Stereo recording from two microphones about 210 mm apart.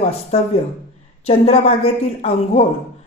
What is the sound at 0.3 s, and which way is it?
Speech, 30° left (ahead or behind).